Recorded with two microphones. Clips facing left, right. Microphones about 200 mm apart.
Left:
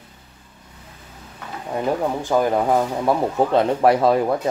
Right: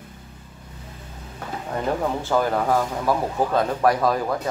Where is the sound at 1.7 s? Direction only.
15° left (ahead or behind).